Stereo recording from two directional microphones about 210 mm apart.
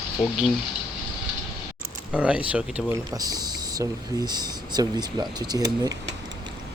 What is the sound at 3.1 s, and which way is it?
Speech, 20° right (ahead or behind).